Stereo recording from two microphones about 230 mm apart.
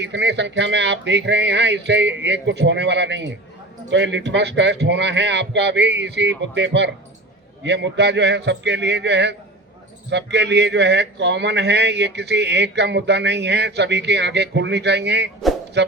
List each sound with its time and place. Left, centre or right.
0.0 s speech: right